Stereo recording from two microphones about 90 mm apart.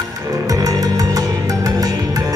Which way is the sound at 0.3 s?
40° right (ahead or behind).